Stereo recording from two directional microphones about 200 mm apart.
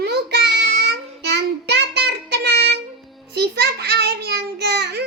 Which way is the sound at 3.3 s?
55° right (ahead or behind).